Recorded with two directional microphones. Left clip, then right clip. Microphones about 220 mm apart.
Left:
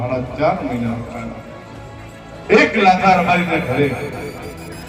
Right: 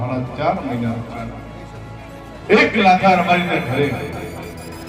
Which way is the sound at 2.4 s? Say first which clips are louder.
Left 1 dB; 30° right (ahead or behind).